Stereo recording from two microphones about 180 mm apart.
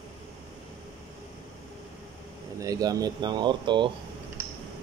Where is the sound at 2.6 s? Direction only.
20° right (ahead or behind).